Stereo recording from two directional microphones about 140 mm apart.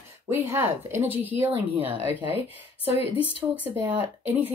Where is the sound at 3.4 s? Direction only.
10° right (ahead or behind).